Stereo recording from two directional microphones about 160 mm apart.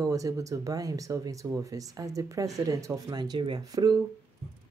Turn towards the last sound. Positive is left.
turn(degrees=-25)  # may be behind; listen again after turning